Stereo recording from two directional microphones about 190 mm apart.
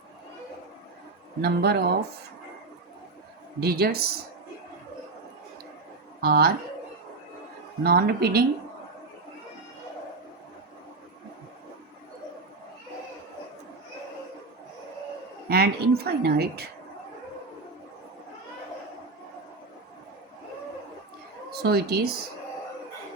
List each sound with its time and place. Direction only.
1.4 s a woman's voice: 55° right (ahead or behind)
3.6 s a woman's voice: 55° right (ahead or behind)
6.2 s a woman's voice: 55° right (ahead or behind)
7.9 s a woman's voice: 55° right (ahead or behind)
15.4 s a woman's voice: 55° right (ahead or behind)
21.5 s speech: 55° right (ahead or behind)